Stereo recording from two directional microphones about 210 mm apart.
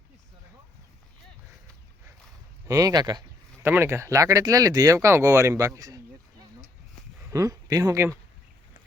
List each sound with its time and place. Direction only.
2.6 s a sound: 15° right (ahead or behind)
3.7 s speech: 10° right (ahead or behind)
7.3 s speech: 15° right (ahead or behind)